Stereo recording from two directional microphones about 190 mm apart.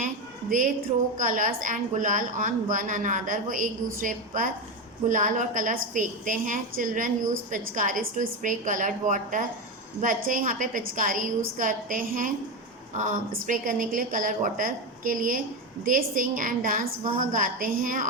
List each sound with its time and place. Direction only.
0.5 s a woman's voice: 45° right (ahead or behind)